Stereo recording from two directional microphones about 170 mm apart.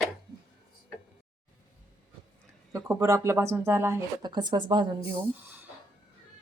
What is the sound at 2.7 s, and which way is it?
Speech, 15° right (ahead or behind).